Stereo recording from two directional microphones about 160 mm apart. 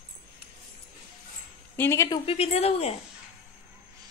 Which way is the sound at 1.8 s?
20° left (ahead or behind).